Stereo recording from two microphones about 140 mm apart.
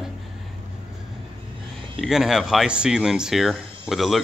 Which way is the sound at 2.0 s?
5° right (ahead or behind).